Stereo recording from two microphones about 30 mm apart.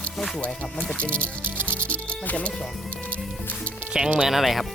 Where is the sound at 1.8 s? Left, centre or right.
Left.